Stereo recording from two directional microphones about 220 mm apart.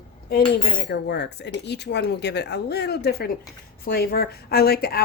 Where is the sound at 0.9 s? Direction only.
50° left (ahead or behind).